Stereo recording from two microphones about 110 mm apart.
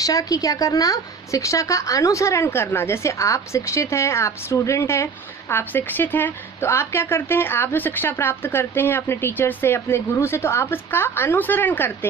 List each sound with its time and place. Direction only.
0.0 s a woman's voice: 30° left (ahead or behind)